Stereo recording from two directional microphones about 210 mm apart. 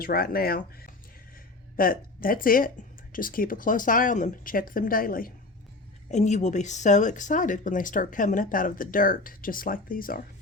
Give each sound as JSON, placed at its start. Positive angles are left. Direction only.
{"t": 0.0, "sound": "speech", "side_deg": 45}